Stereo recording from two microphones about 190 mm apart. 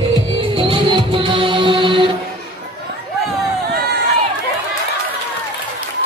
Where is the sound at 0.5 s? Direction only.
25° right (ahead or behind).